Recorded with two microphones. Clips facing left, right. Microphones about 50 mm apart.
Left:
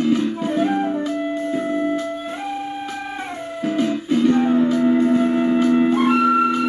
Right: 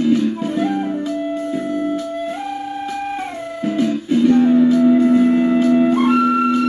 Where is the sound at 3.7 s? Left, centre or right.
Left.